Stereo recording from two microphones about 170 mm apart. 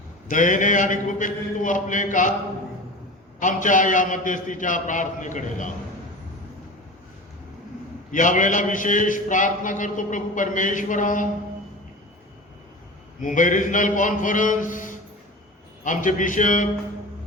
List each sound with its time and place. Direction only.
0.3 s a man's voice: 50° left (ahead or behind)
3.4 s a man's voice: 50° left (ahead or behind)
8.1 s a man's voice: 50° left (ahead or behind)
13.2 s a man's voice: 50° left (ahead or behind)